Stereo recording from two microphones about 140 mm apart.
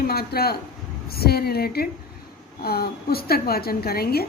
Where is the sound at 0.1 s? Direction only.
90° left.